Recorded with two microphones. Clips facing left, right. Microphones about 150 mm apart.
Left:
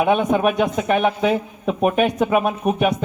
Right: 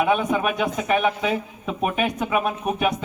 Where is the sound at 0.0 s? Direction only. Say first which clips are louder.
Left 4 dB; 40° left (ahead or behind).